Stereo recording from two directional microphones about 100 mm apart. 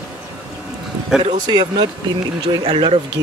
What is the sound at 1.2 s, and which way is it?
Speech, 45° right (ahead or behind).